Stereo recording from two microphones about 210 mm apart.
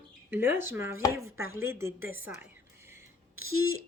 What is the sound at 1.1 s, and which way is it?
Speech, 75° right (ahead or behind).